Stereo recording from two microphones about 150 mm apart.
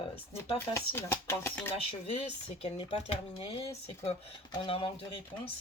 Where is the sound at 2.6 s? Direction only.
40° left (ahead or behind).